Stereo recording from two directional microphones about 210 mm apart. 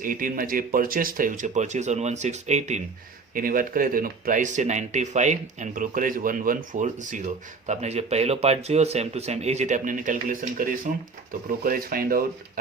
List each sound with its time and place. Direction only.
0.0 s speech: 40° right (ahead or behind)